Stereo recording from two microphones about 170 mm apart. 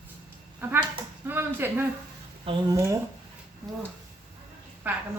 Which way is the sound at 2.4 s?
25° right (ahead or behind).